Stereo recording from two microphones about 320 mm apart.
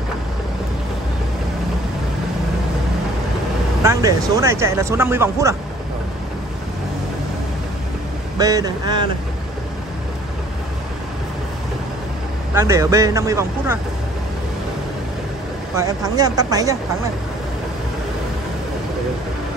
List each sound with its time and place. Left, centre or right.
3.8 s speech: centre
8.4 s speech: centre
12.5 s speech: centre
15.7 s speech: centre